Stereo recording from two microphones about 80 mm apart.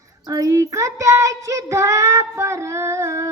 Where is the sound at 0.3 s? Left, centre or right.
Right.